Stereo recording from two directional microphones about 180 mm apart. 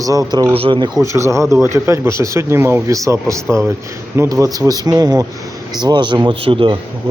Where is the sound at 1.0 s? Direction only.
15° right (ahead or behind).